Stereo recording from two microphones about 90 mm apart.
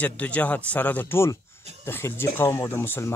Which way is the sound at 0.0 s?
15° left (ahead or behind).